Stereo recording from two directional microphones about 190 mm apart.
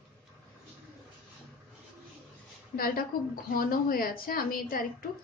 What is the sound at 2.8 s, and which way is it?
A woman's voice, 50° left (ahead or behind).